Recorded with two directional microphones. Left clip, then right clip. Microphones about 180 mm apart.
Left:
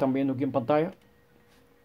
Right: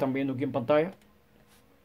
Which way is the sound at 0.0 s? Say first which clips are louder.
Left 3 dB; 10° left (ahead or behind).